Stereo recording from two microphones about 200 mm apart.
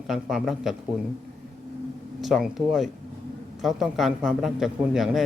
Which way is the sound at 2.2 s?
Centre (ahead or behind).